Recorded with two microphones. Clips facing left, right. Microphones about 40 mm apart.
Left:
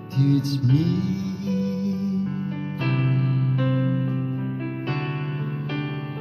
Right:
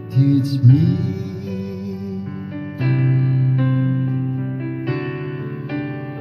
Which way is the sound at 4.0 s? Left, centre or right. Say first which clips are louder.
Right 4 dB; centre.